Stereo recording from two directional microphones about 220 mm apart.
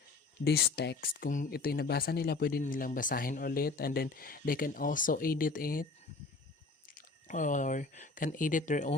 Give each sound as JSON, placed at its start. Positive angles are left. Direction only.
{"t": 0.4, "sound": "speech", "side_deg": 45}
{"t": 6.9, "sound": "speech", "side_deg": 35}